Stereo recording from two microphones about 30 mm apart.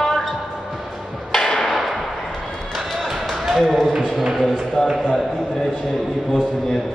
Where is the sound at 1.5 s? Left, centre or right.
Centre.